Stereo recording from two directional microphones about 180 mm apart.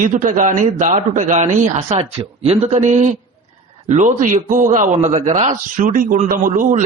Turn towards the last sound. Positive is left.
turn(degrees=-45)  # may be behind; listen again after turning